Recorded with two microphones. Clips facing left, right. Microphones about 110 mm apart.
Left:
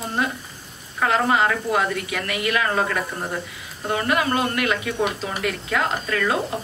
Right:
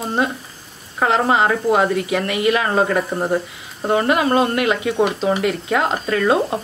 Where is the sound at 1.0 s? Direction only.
25° right (ahead or behind).